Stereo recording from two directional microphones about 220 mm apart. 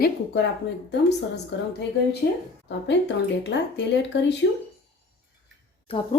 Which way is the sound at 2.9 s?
50° left (ahead or behind).